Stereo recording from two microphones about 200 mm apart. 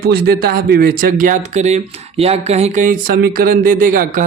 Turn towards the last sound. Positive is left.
turn(degrees=-45)  # may be behind; listen again after turning